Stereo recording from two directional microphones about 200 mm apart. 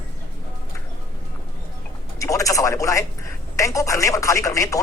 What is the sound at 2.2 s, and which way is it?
Speech, 15° left (ahead or behind).